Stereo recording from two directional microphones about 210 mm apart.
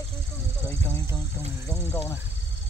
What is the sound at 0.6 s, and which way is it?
Speech, 10° left (ahead or behind).